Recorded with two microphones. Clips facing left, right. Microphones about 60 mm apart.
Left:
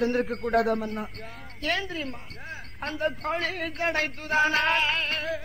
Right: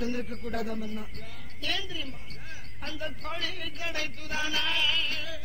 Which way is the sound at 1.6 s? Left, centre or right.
Left.